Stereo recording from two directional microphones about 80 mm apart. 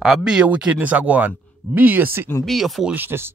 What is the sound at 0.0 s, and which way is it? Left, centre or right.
Speech, centre.